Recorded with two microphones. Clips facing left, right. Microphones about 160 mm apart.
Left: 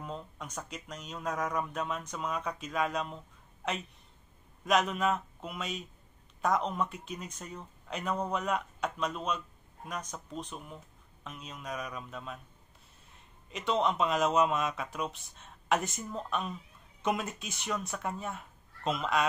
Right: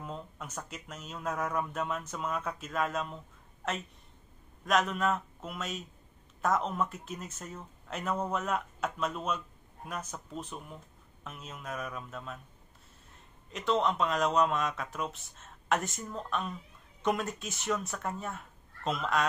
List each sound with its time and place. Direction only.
0.0 s a sound: 5° right (ahead or behind)
0.7 s speech: 5° right (ahead or behind)
4.6 s speech: centre (ahead or behind)
13.5 s speech: centre (ahead or behind)